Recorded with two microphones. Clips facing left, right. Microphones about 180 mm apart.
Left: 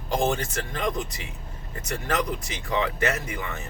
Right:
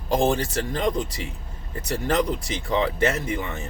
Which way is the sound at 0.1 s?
35° right (ahead or behind).